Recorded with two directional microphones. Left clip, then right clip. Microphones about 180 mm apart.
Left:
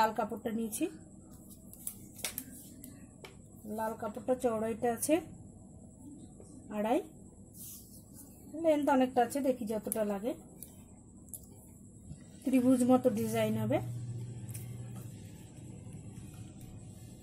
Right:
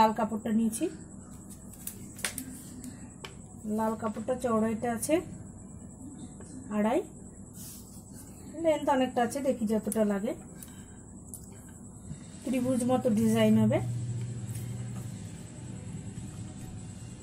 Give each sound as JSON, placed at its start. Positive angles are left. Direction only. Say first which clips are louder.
{"t": 0.0, "sound": "a woman's voice", "louder": "right 5 dB", "side_deg": 55}
{"t": 3.7, "sound": "a woman's voice", "louder": "right 5 dB", "side_deg": 55}
{"t": 6.7, "sound": "a woman's voice", "louder": "right 3 dB", "side_deg": 55}
{"t": 8.6, "sound": "a woman's voice", "louder": "right 2 dB", "side_deg": 55}
{"t": 12.4, "sound": "a woman's voice", "louder": "left 1 dB", "side_deg": 55}